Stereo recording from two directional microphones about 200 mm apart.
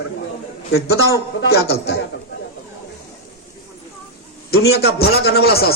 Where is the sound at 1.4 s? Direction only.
55° left (ahead or behind).